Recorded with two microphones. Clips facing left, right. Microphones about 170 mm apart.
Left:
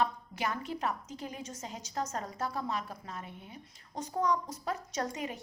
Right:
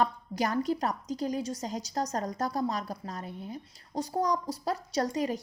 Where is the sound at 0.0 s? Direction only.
40° right (ahead or behind).